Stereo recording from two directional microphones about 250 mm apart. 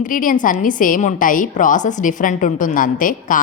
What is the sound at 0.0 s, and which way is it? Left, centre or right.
A woman's voice, left.